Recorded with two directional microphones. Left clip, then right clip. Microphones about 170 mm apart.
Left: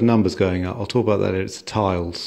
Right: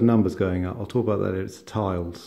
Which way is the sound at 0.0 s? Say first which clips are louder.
Left 3 dB; 15° left (ahead or behind).